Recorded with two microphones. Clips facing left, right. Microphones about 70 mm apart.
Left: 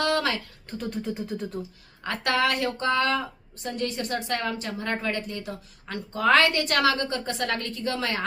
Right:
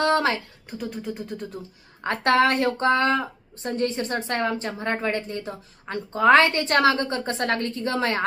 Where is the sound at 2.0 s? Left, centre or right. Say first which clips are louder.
Right 5 dB; right.